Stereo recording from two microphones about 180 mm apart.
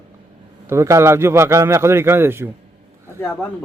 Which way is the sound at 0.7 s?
15° right (ahead or behind).